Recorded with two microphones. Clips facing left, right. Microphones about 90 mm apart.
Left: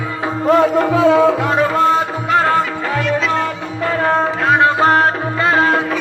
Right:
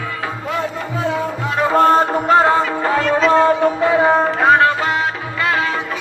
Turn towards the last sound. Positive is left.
turn(degrees=45)  # may be behind; listen again after turning